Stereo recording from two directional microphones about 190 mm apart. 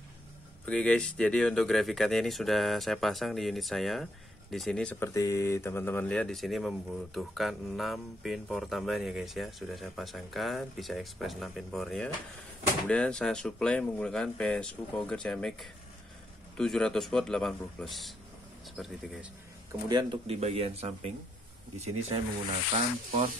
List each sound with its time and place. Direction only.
0.7 s speech: 5° left (ahead or behind)
5.1 s speech: 15° left (ahead or behind); by 18.1 s centre (ahead or behind)
19.9 s speech: 25° right (ahead or behind)